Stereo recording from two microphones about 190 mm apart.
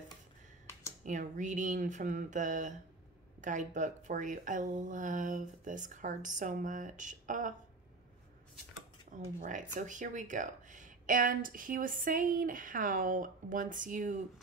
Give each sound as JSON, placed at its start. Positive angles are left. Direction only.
{"t": 1.0, "sound": "speech", "side_deg": -40}
{"t": 9.1, "sound": "speech", "side_deg": -40}